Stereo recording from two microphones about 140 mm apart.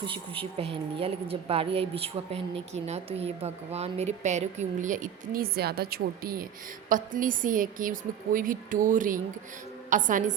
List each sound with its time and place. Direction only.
0.0 s speech: 40° right (ahead or behind); by 6.4 s 90° right
6.8 s a woman's voice: 75° right (ahead or behind)